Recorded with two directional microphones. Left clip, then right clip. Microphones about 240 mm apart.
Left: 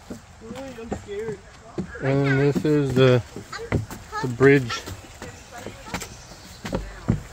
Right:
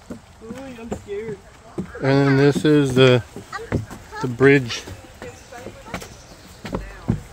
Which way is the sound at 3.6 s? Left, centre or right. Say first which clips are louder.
Right 1 dB; centre.